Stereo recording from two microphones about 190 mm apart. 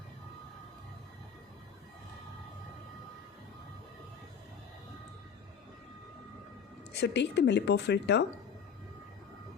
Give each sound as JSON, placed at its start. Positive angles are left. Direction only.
{"t": 6.9, "sound": "a woman's voice", "side_deg": 65}